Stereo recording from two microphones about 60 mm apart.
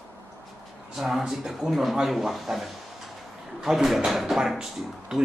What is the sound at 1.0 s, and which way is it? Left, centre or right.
Speech, centre.